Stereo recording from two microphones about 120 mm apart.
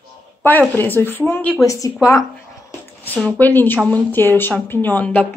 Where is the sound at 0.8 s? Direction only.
15° left (ahead or behind).